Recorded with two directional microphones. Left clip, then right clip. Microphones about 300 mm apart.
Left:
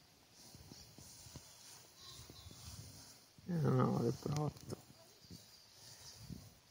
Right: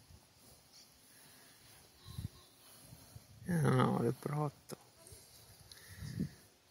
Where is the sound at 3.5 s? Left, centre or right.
Centre.